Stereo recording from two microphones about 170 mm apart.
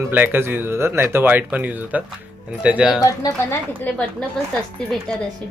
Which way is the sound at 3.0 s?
20° left (ahead or behind).